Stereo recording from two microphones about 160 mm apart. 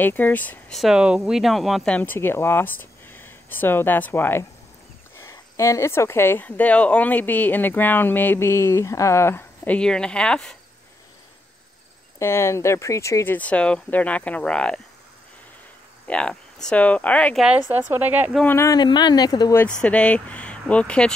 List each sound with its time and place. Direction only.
0.0 s speech: 10° left (ahead or behind)
12.2 s speech: 15° left (ahead or behind)
16.1 s speech: 5° left (ahead or behind)
17.4 s speech: 10° right (ahead or behind)
18.3 s speech: 10° left (ahead or behind)
19.8 s speech: 5° left (ahead or behind)